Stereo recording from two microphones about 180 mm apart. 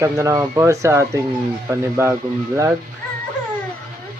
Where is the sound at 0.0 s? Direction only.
15° right (ahead or behind).